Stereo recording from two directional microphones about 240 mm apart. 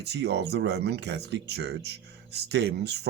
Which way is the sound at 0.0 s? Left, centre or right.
Right.